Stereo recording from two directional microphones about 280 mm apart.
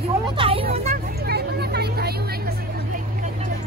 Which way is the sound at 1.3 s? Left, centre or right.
Right.